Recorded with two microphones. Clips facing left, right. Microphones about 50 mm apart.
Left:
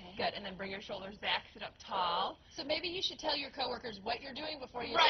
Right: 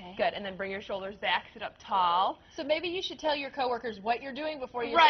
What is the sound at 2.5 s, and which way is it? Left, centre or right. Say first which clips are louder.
A woman's voice: right 8 dB; right.